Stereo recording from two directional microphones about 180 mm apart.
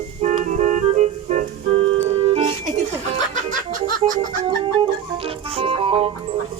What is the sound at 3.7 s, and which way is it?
Laughter, 45° right (ahead or behind).